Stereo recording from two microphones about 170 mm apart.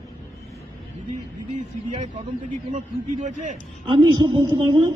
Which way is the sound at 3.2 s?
45° right (ahead or behind).